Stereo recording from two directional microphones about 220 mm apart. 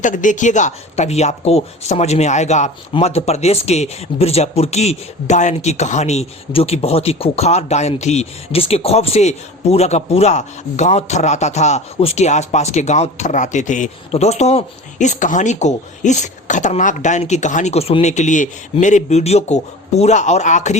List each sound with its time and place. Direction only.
0.0 s speech: 35° left (ahead or behind)